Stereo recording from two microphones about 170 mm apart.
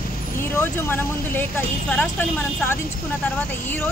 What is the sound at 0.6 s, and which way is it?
Speech, 10° left (ahead or behind).